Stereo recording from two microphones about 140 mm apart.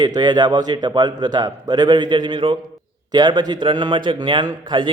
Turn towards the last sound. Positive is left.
turn(degrees=-35)  # may be behind; listen again after turning